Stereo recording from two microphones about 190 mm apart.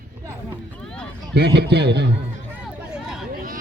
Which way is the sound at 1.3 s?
60° right (ahead or behind).